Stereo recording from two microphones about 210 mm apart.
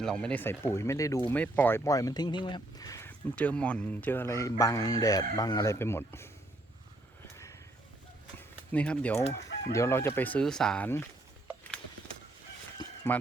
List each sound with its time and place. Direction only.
0.0 s speech: 5° left (ahead or behind)
8.7 s speech: 5° left (ahead or behind)
12.8 s a sound: 20° left (ahead or behind)